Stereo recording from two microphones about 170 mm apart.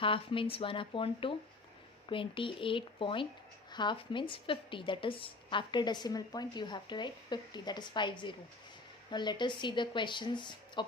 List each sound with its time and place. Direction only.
0.0 s a woman's voice: 30° left (ahead or behind)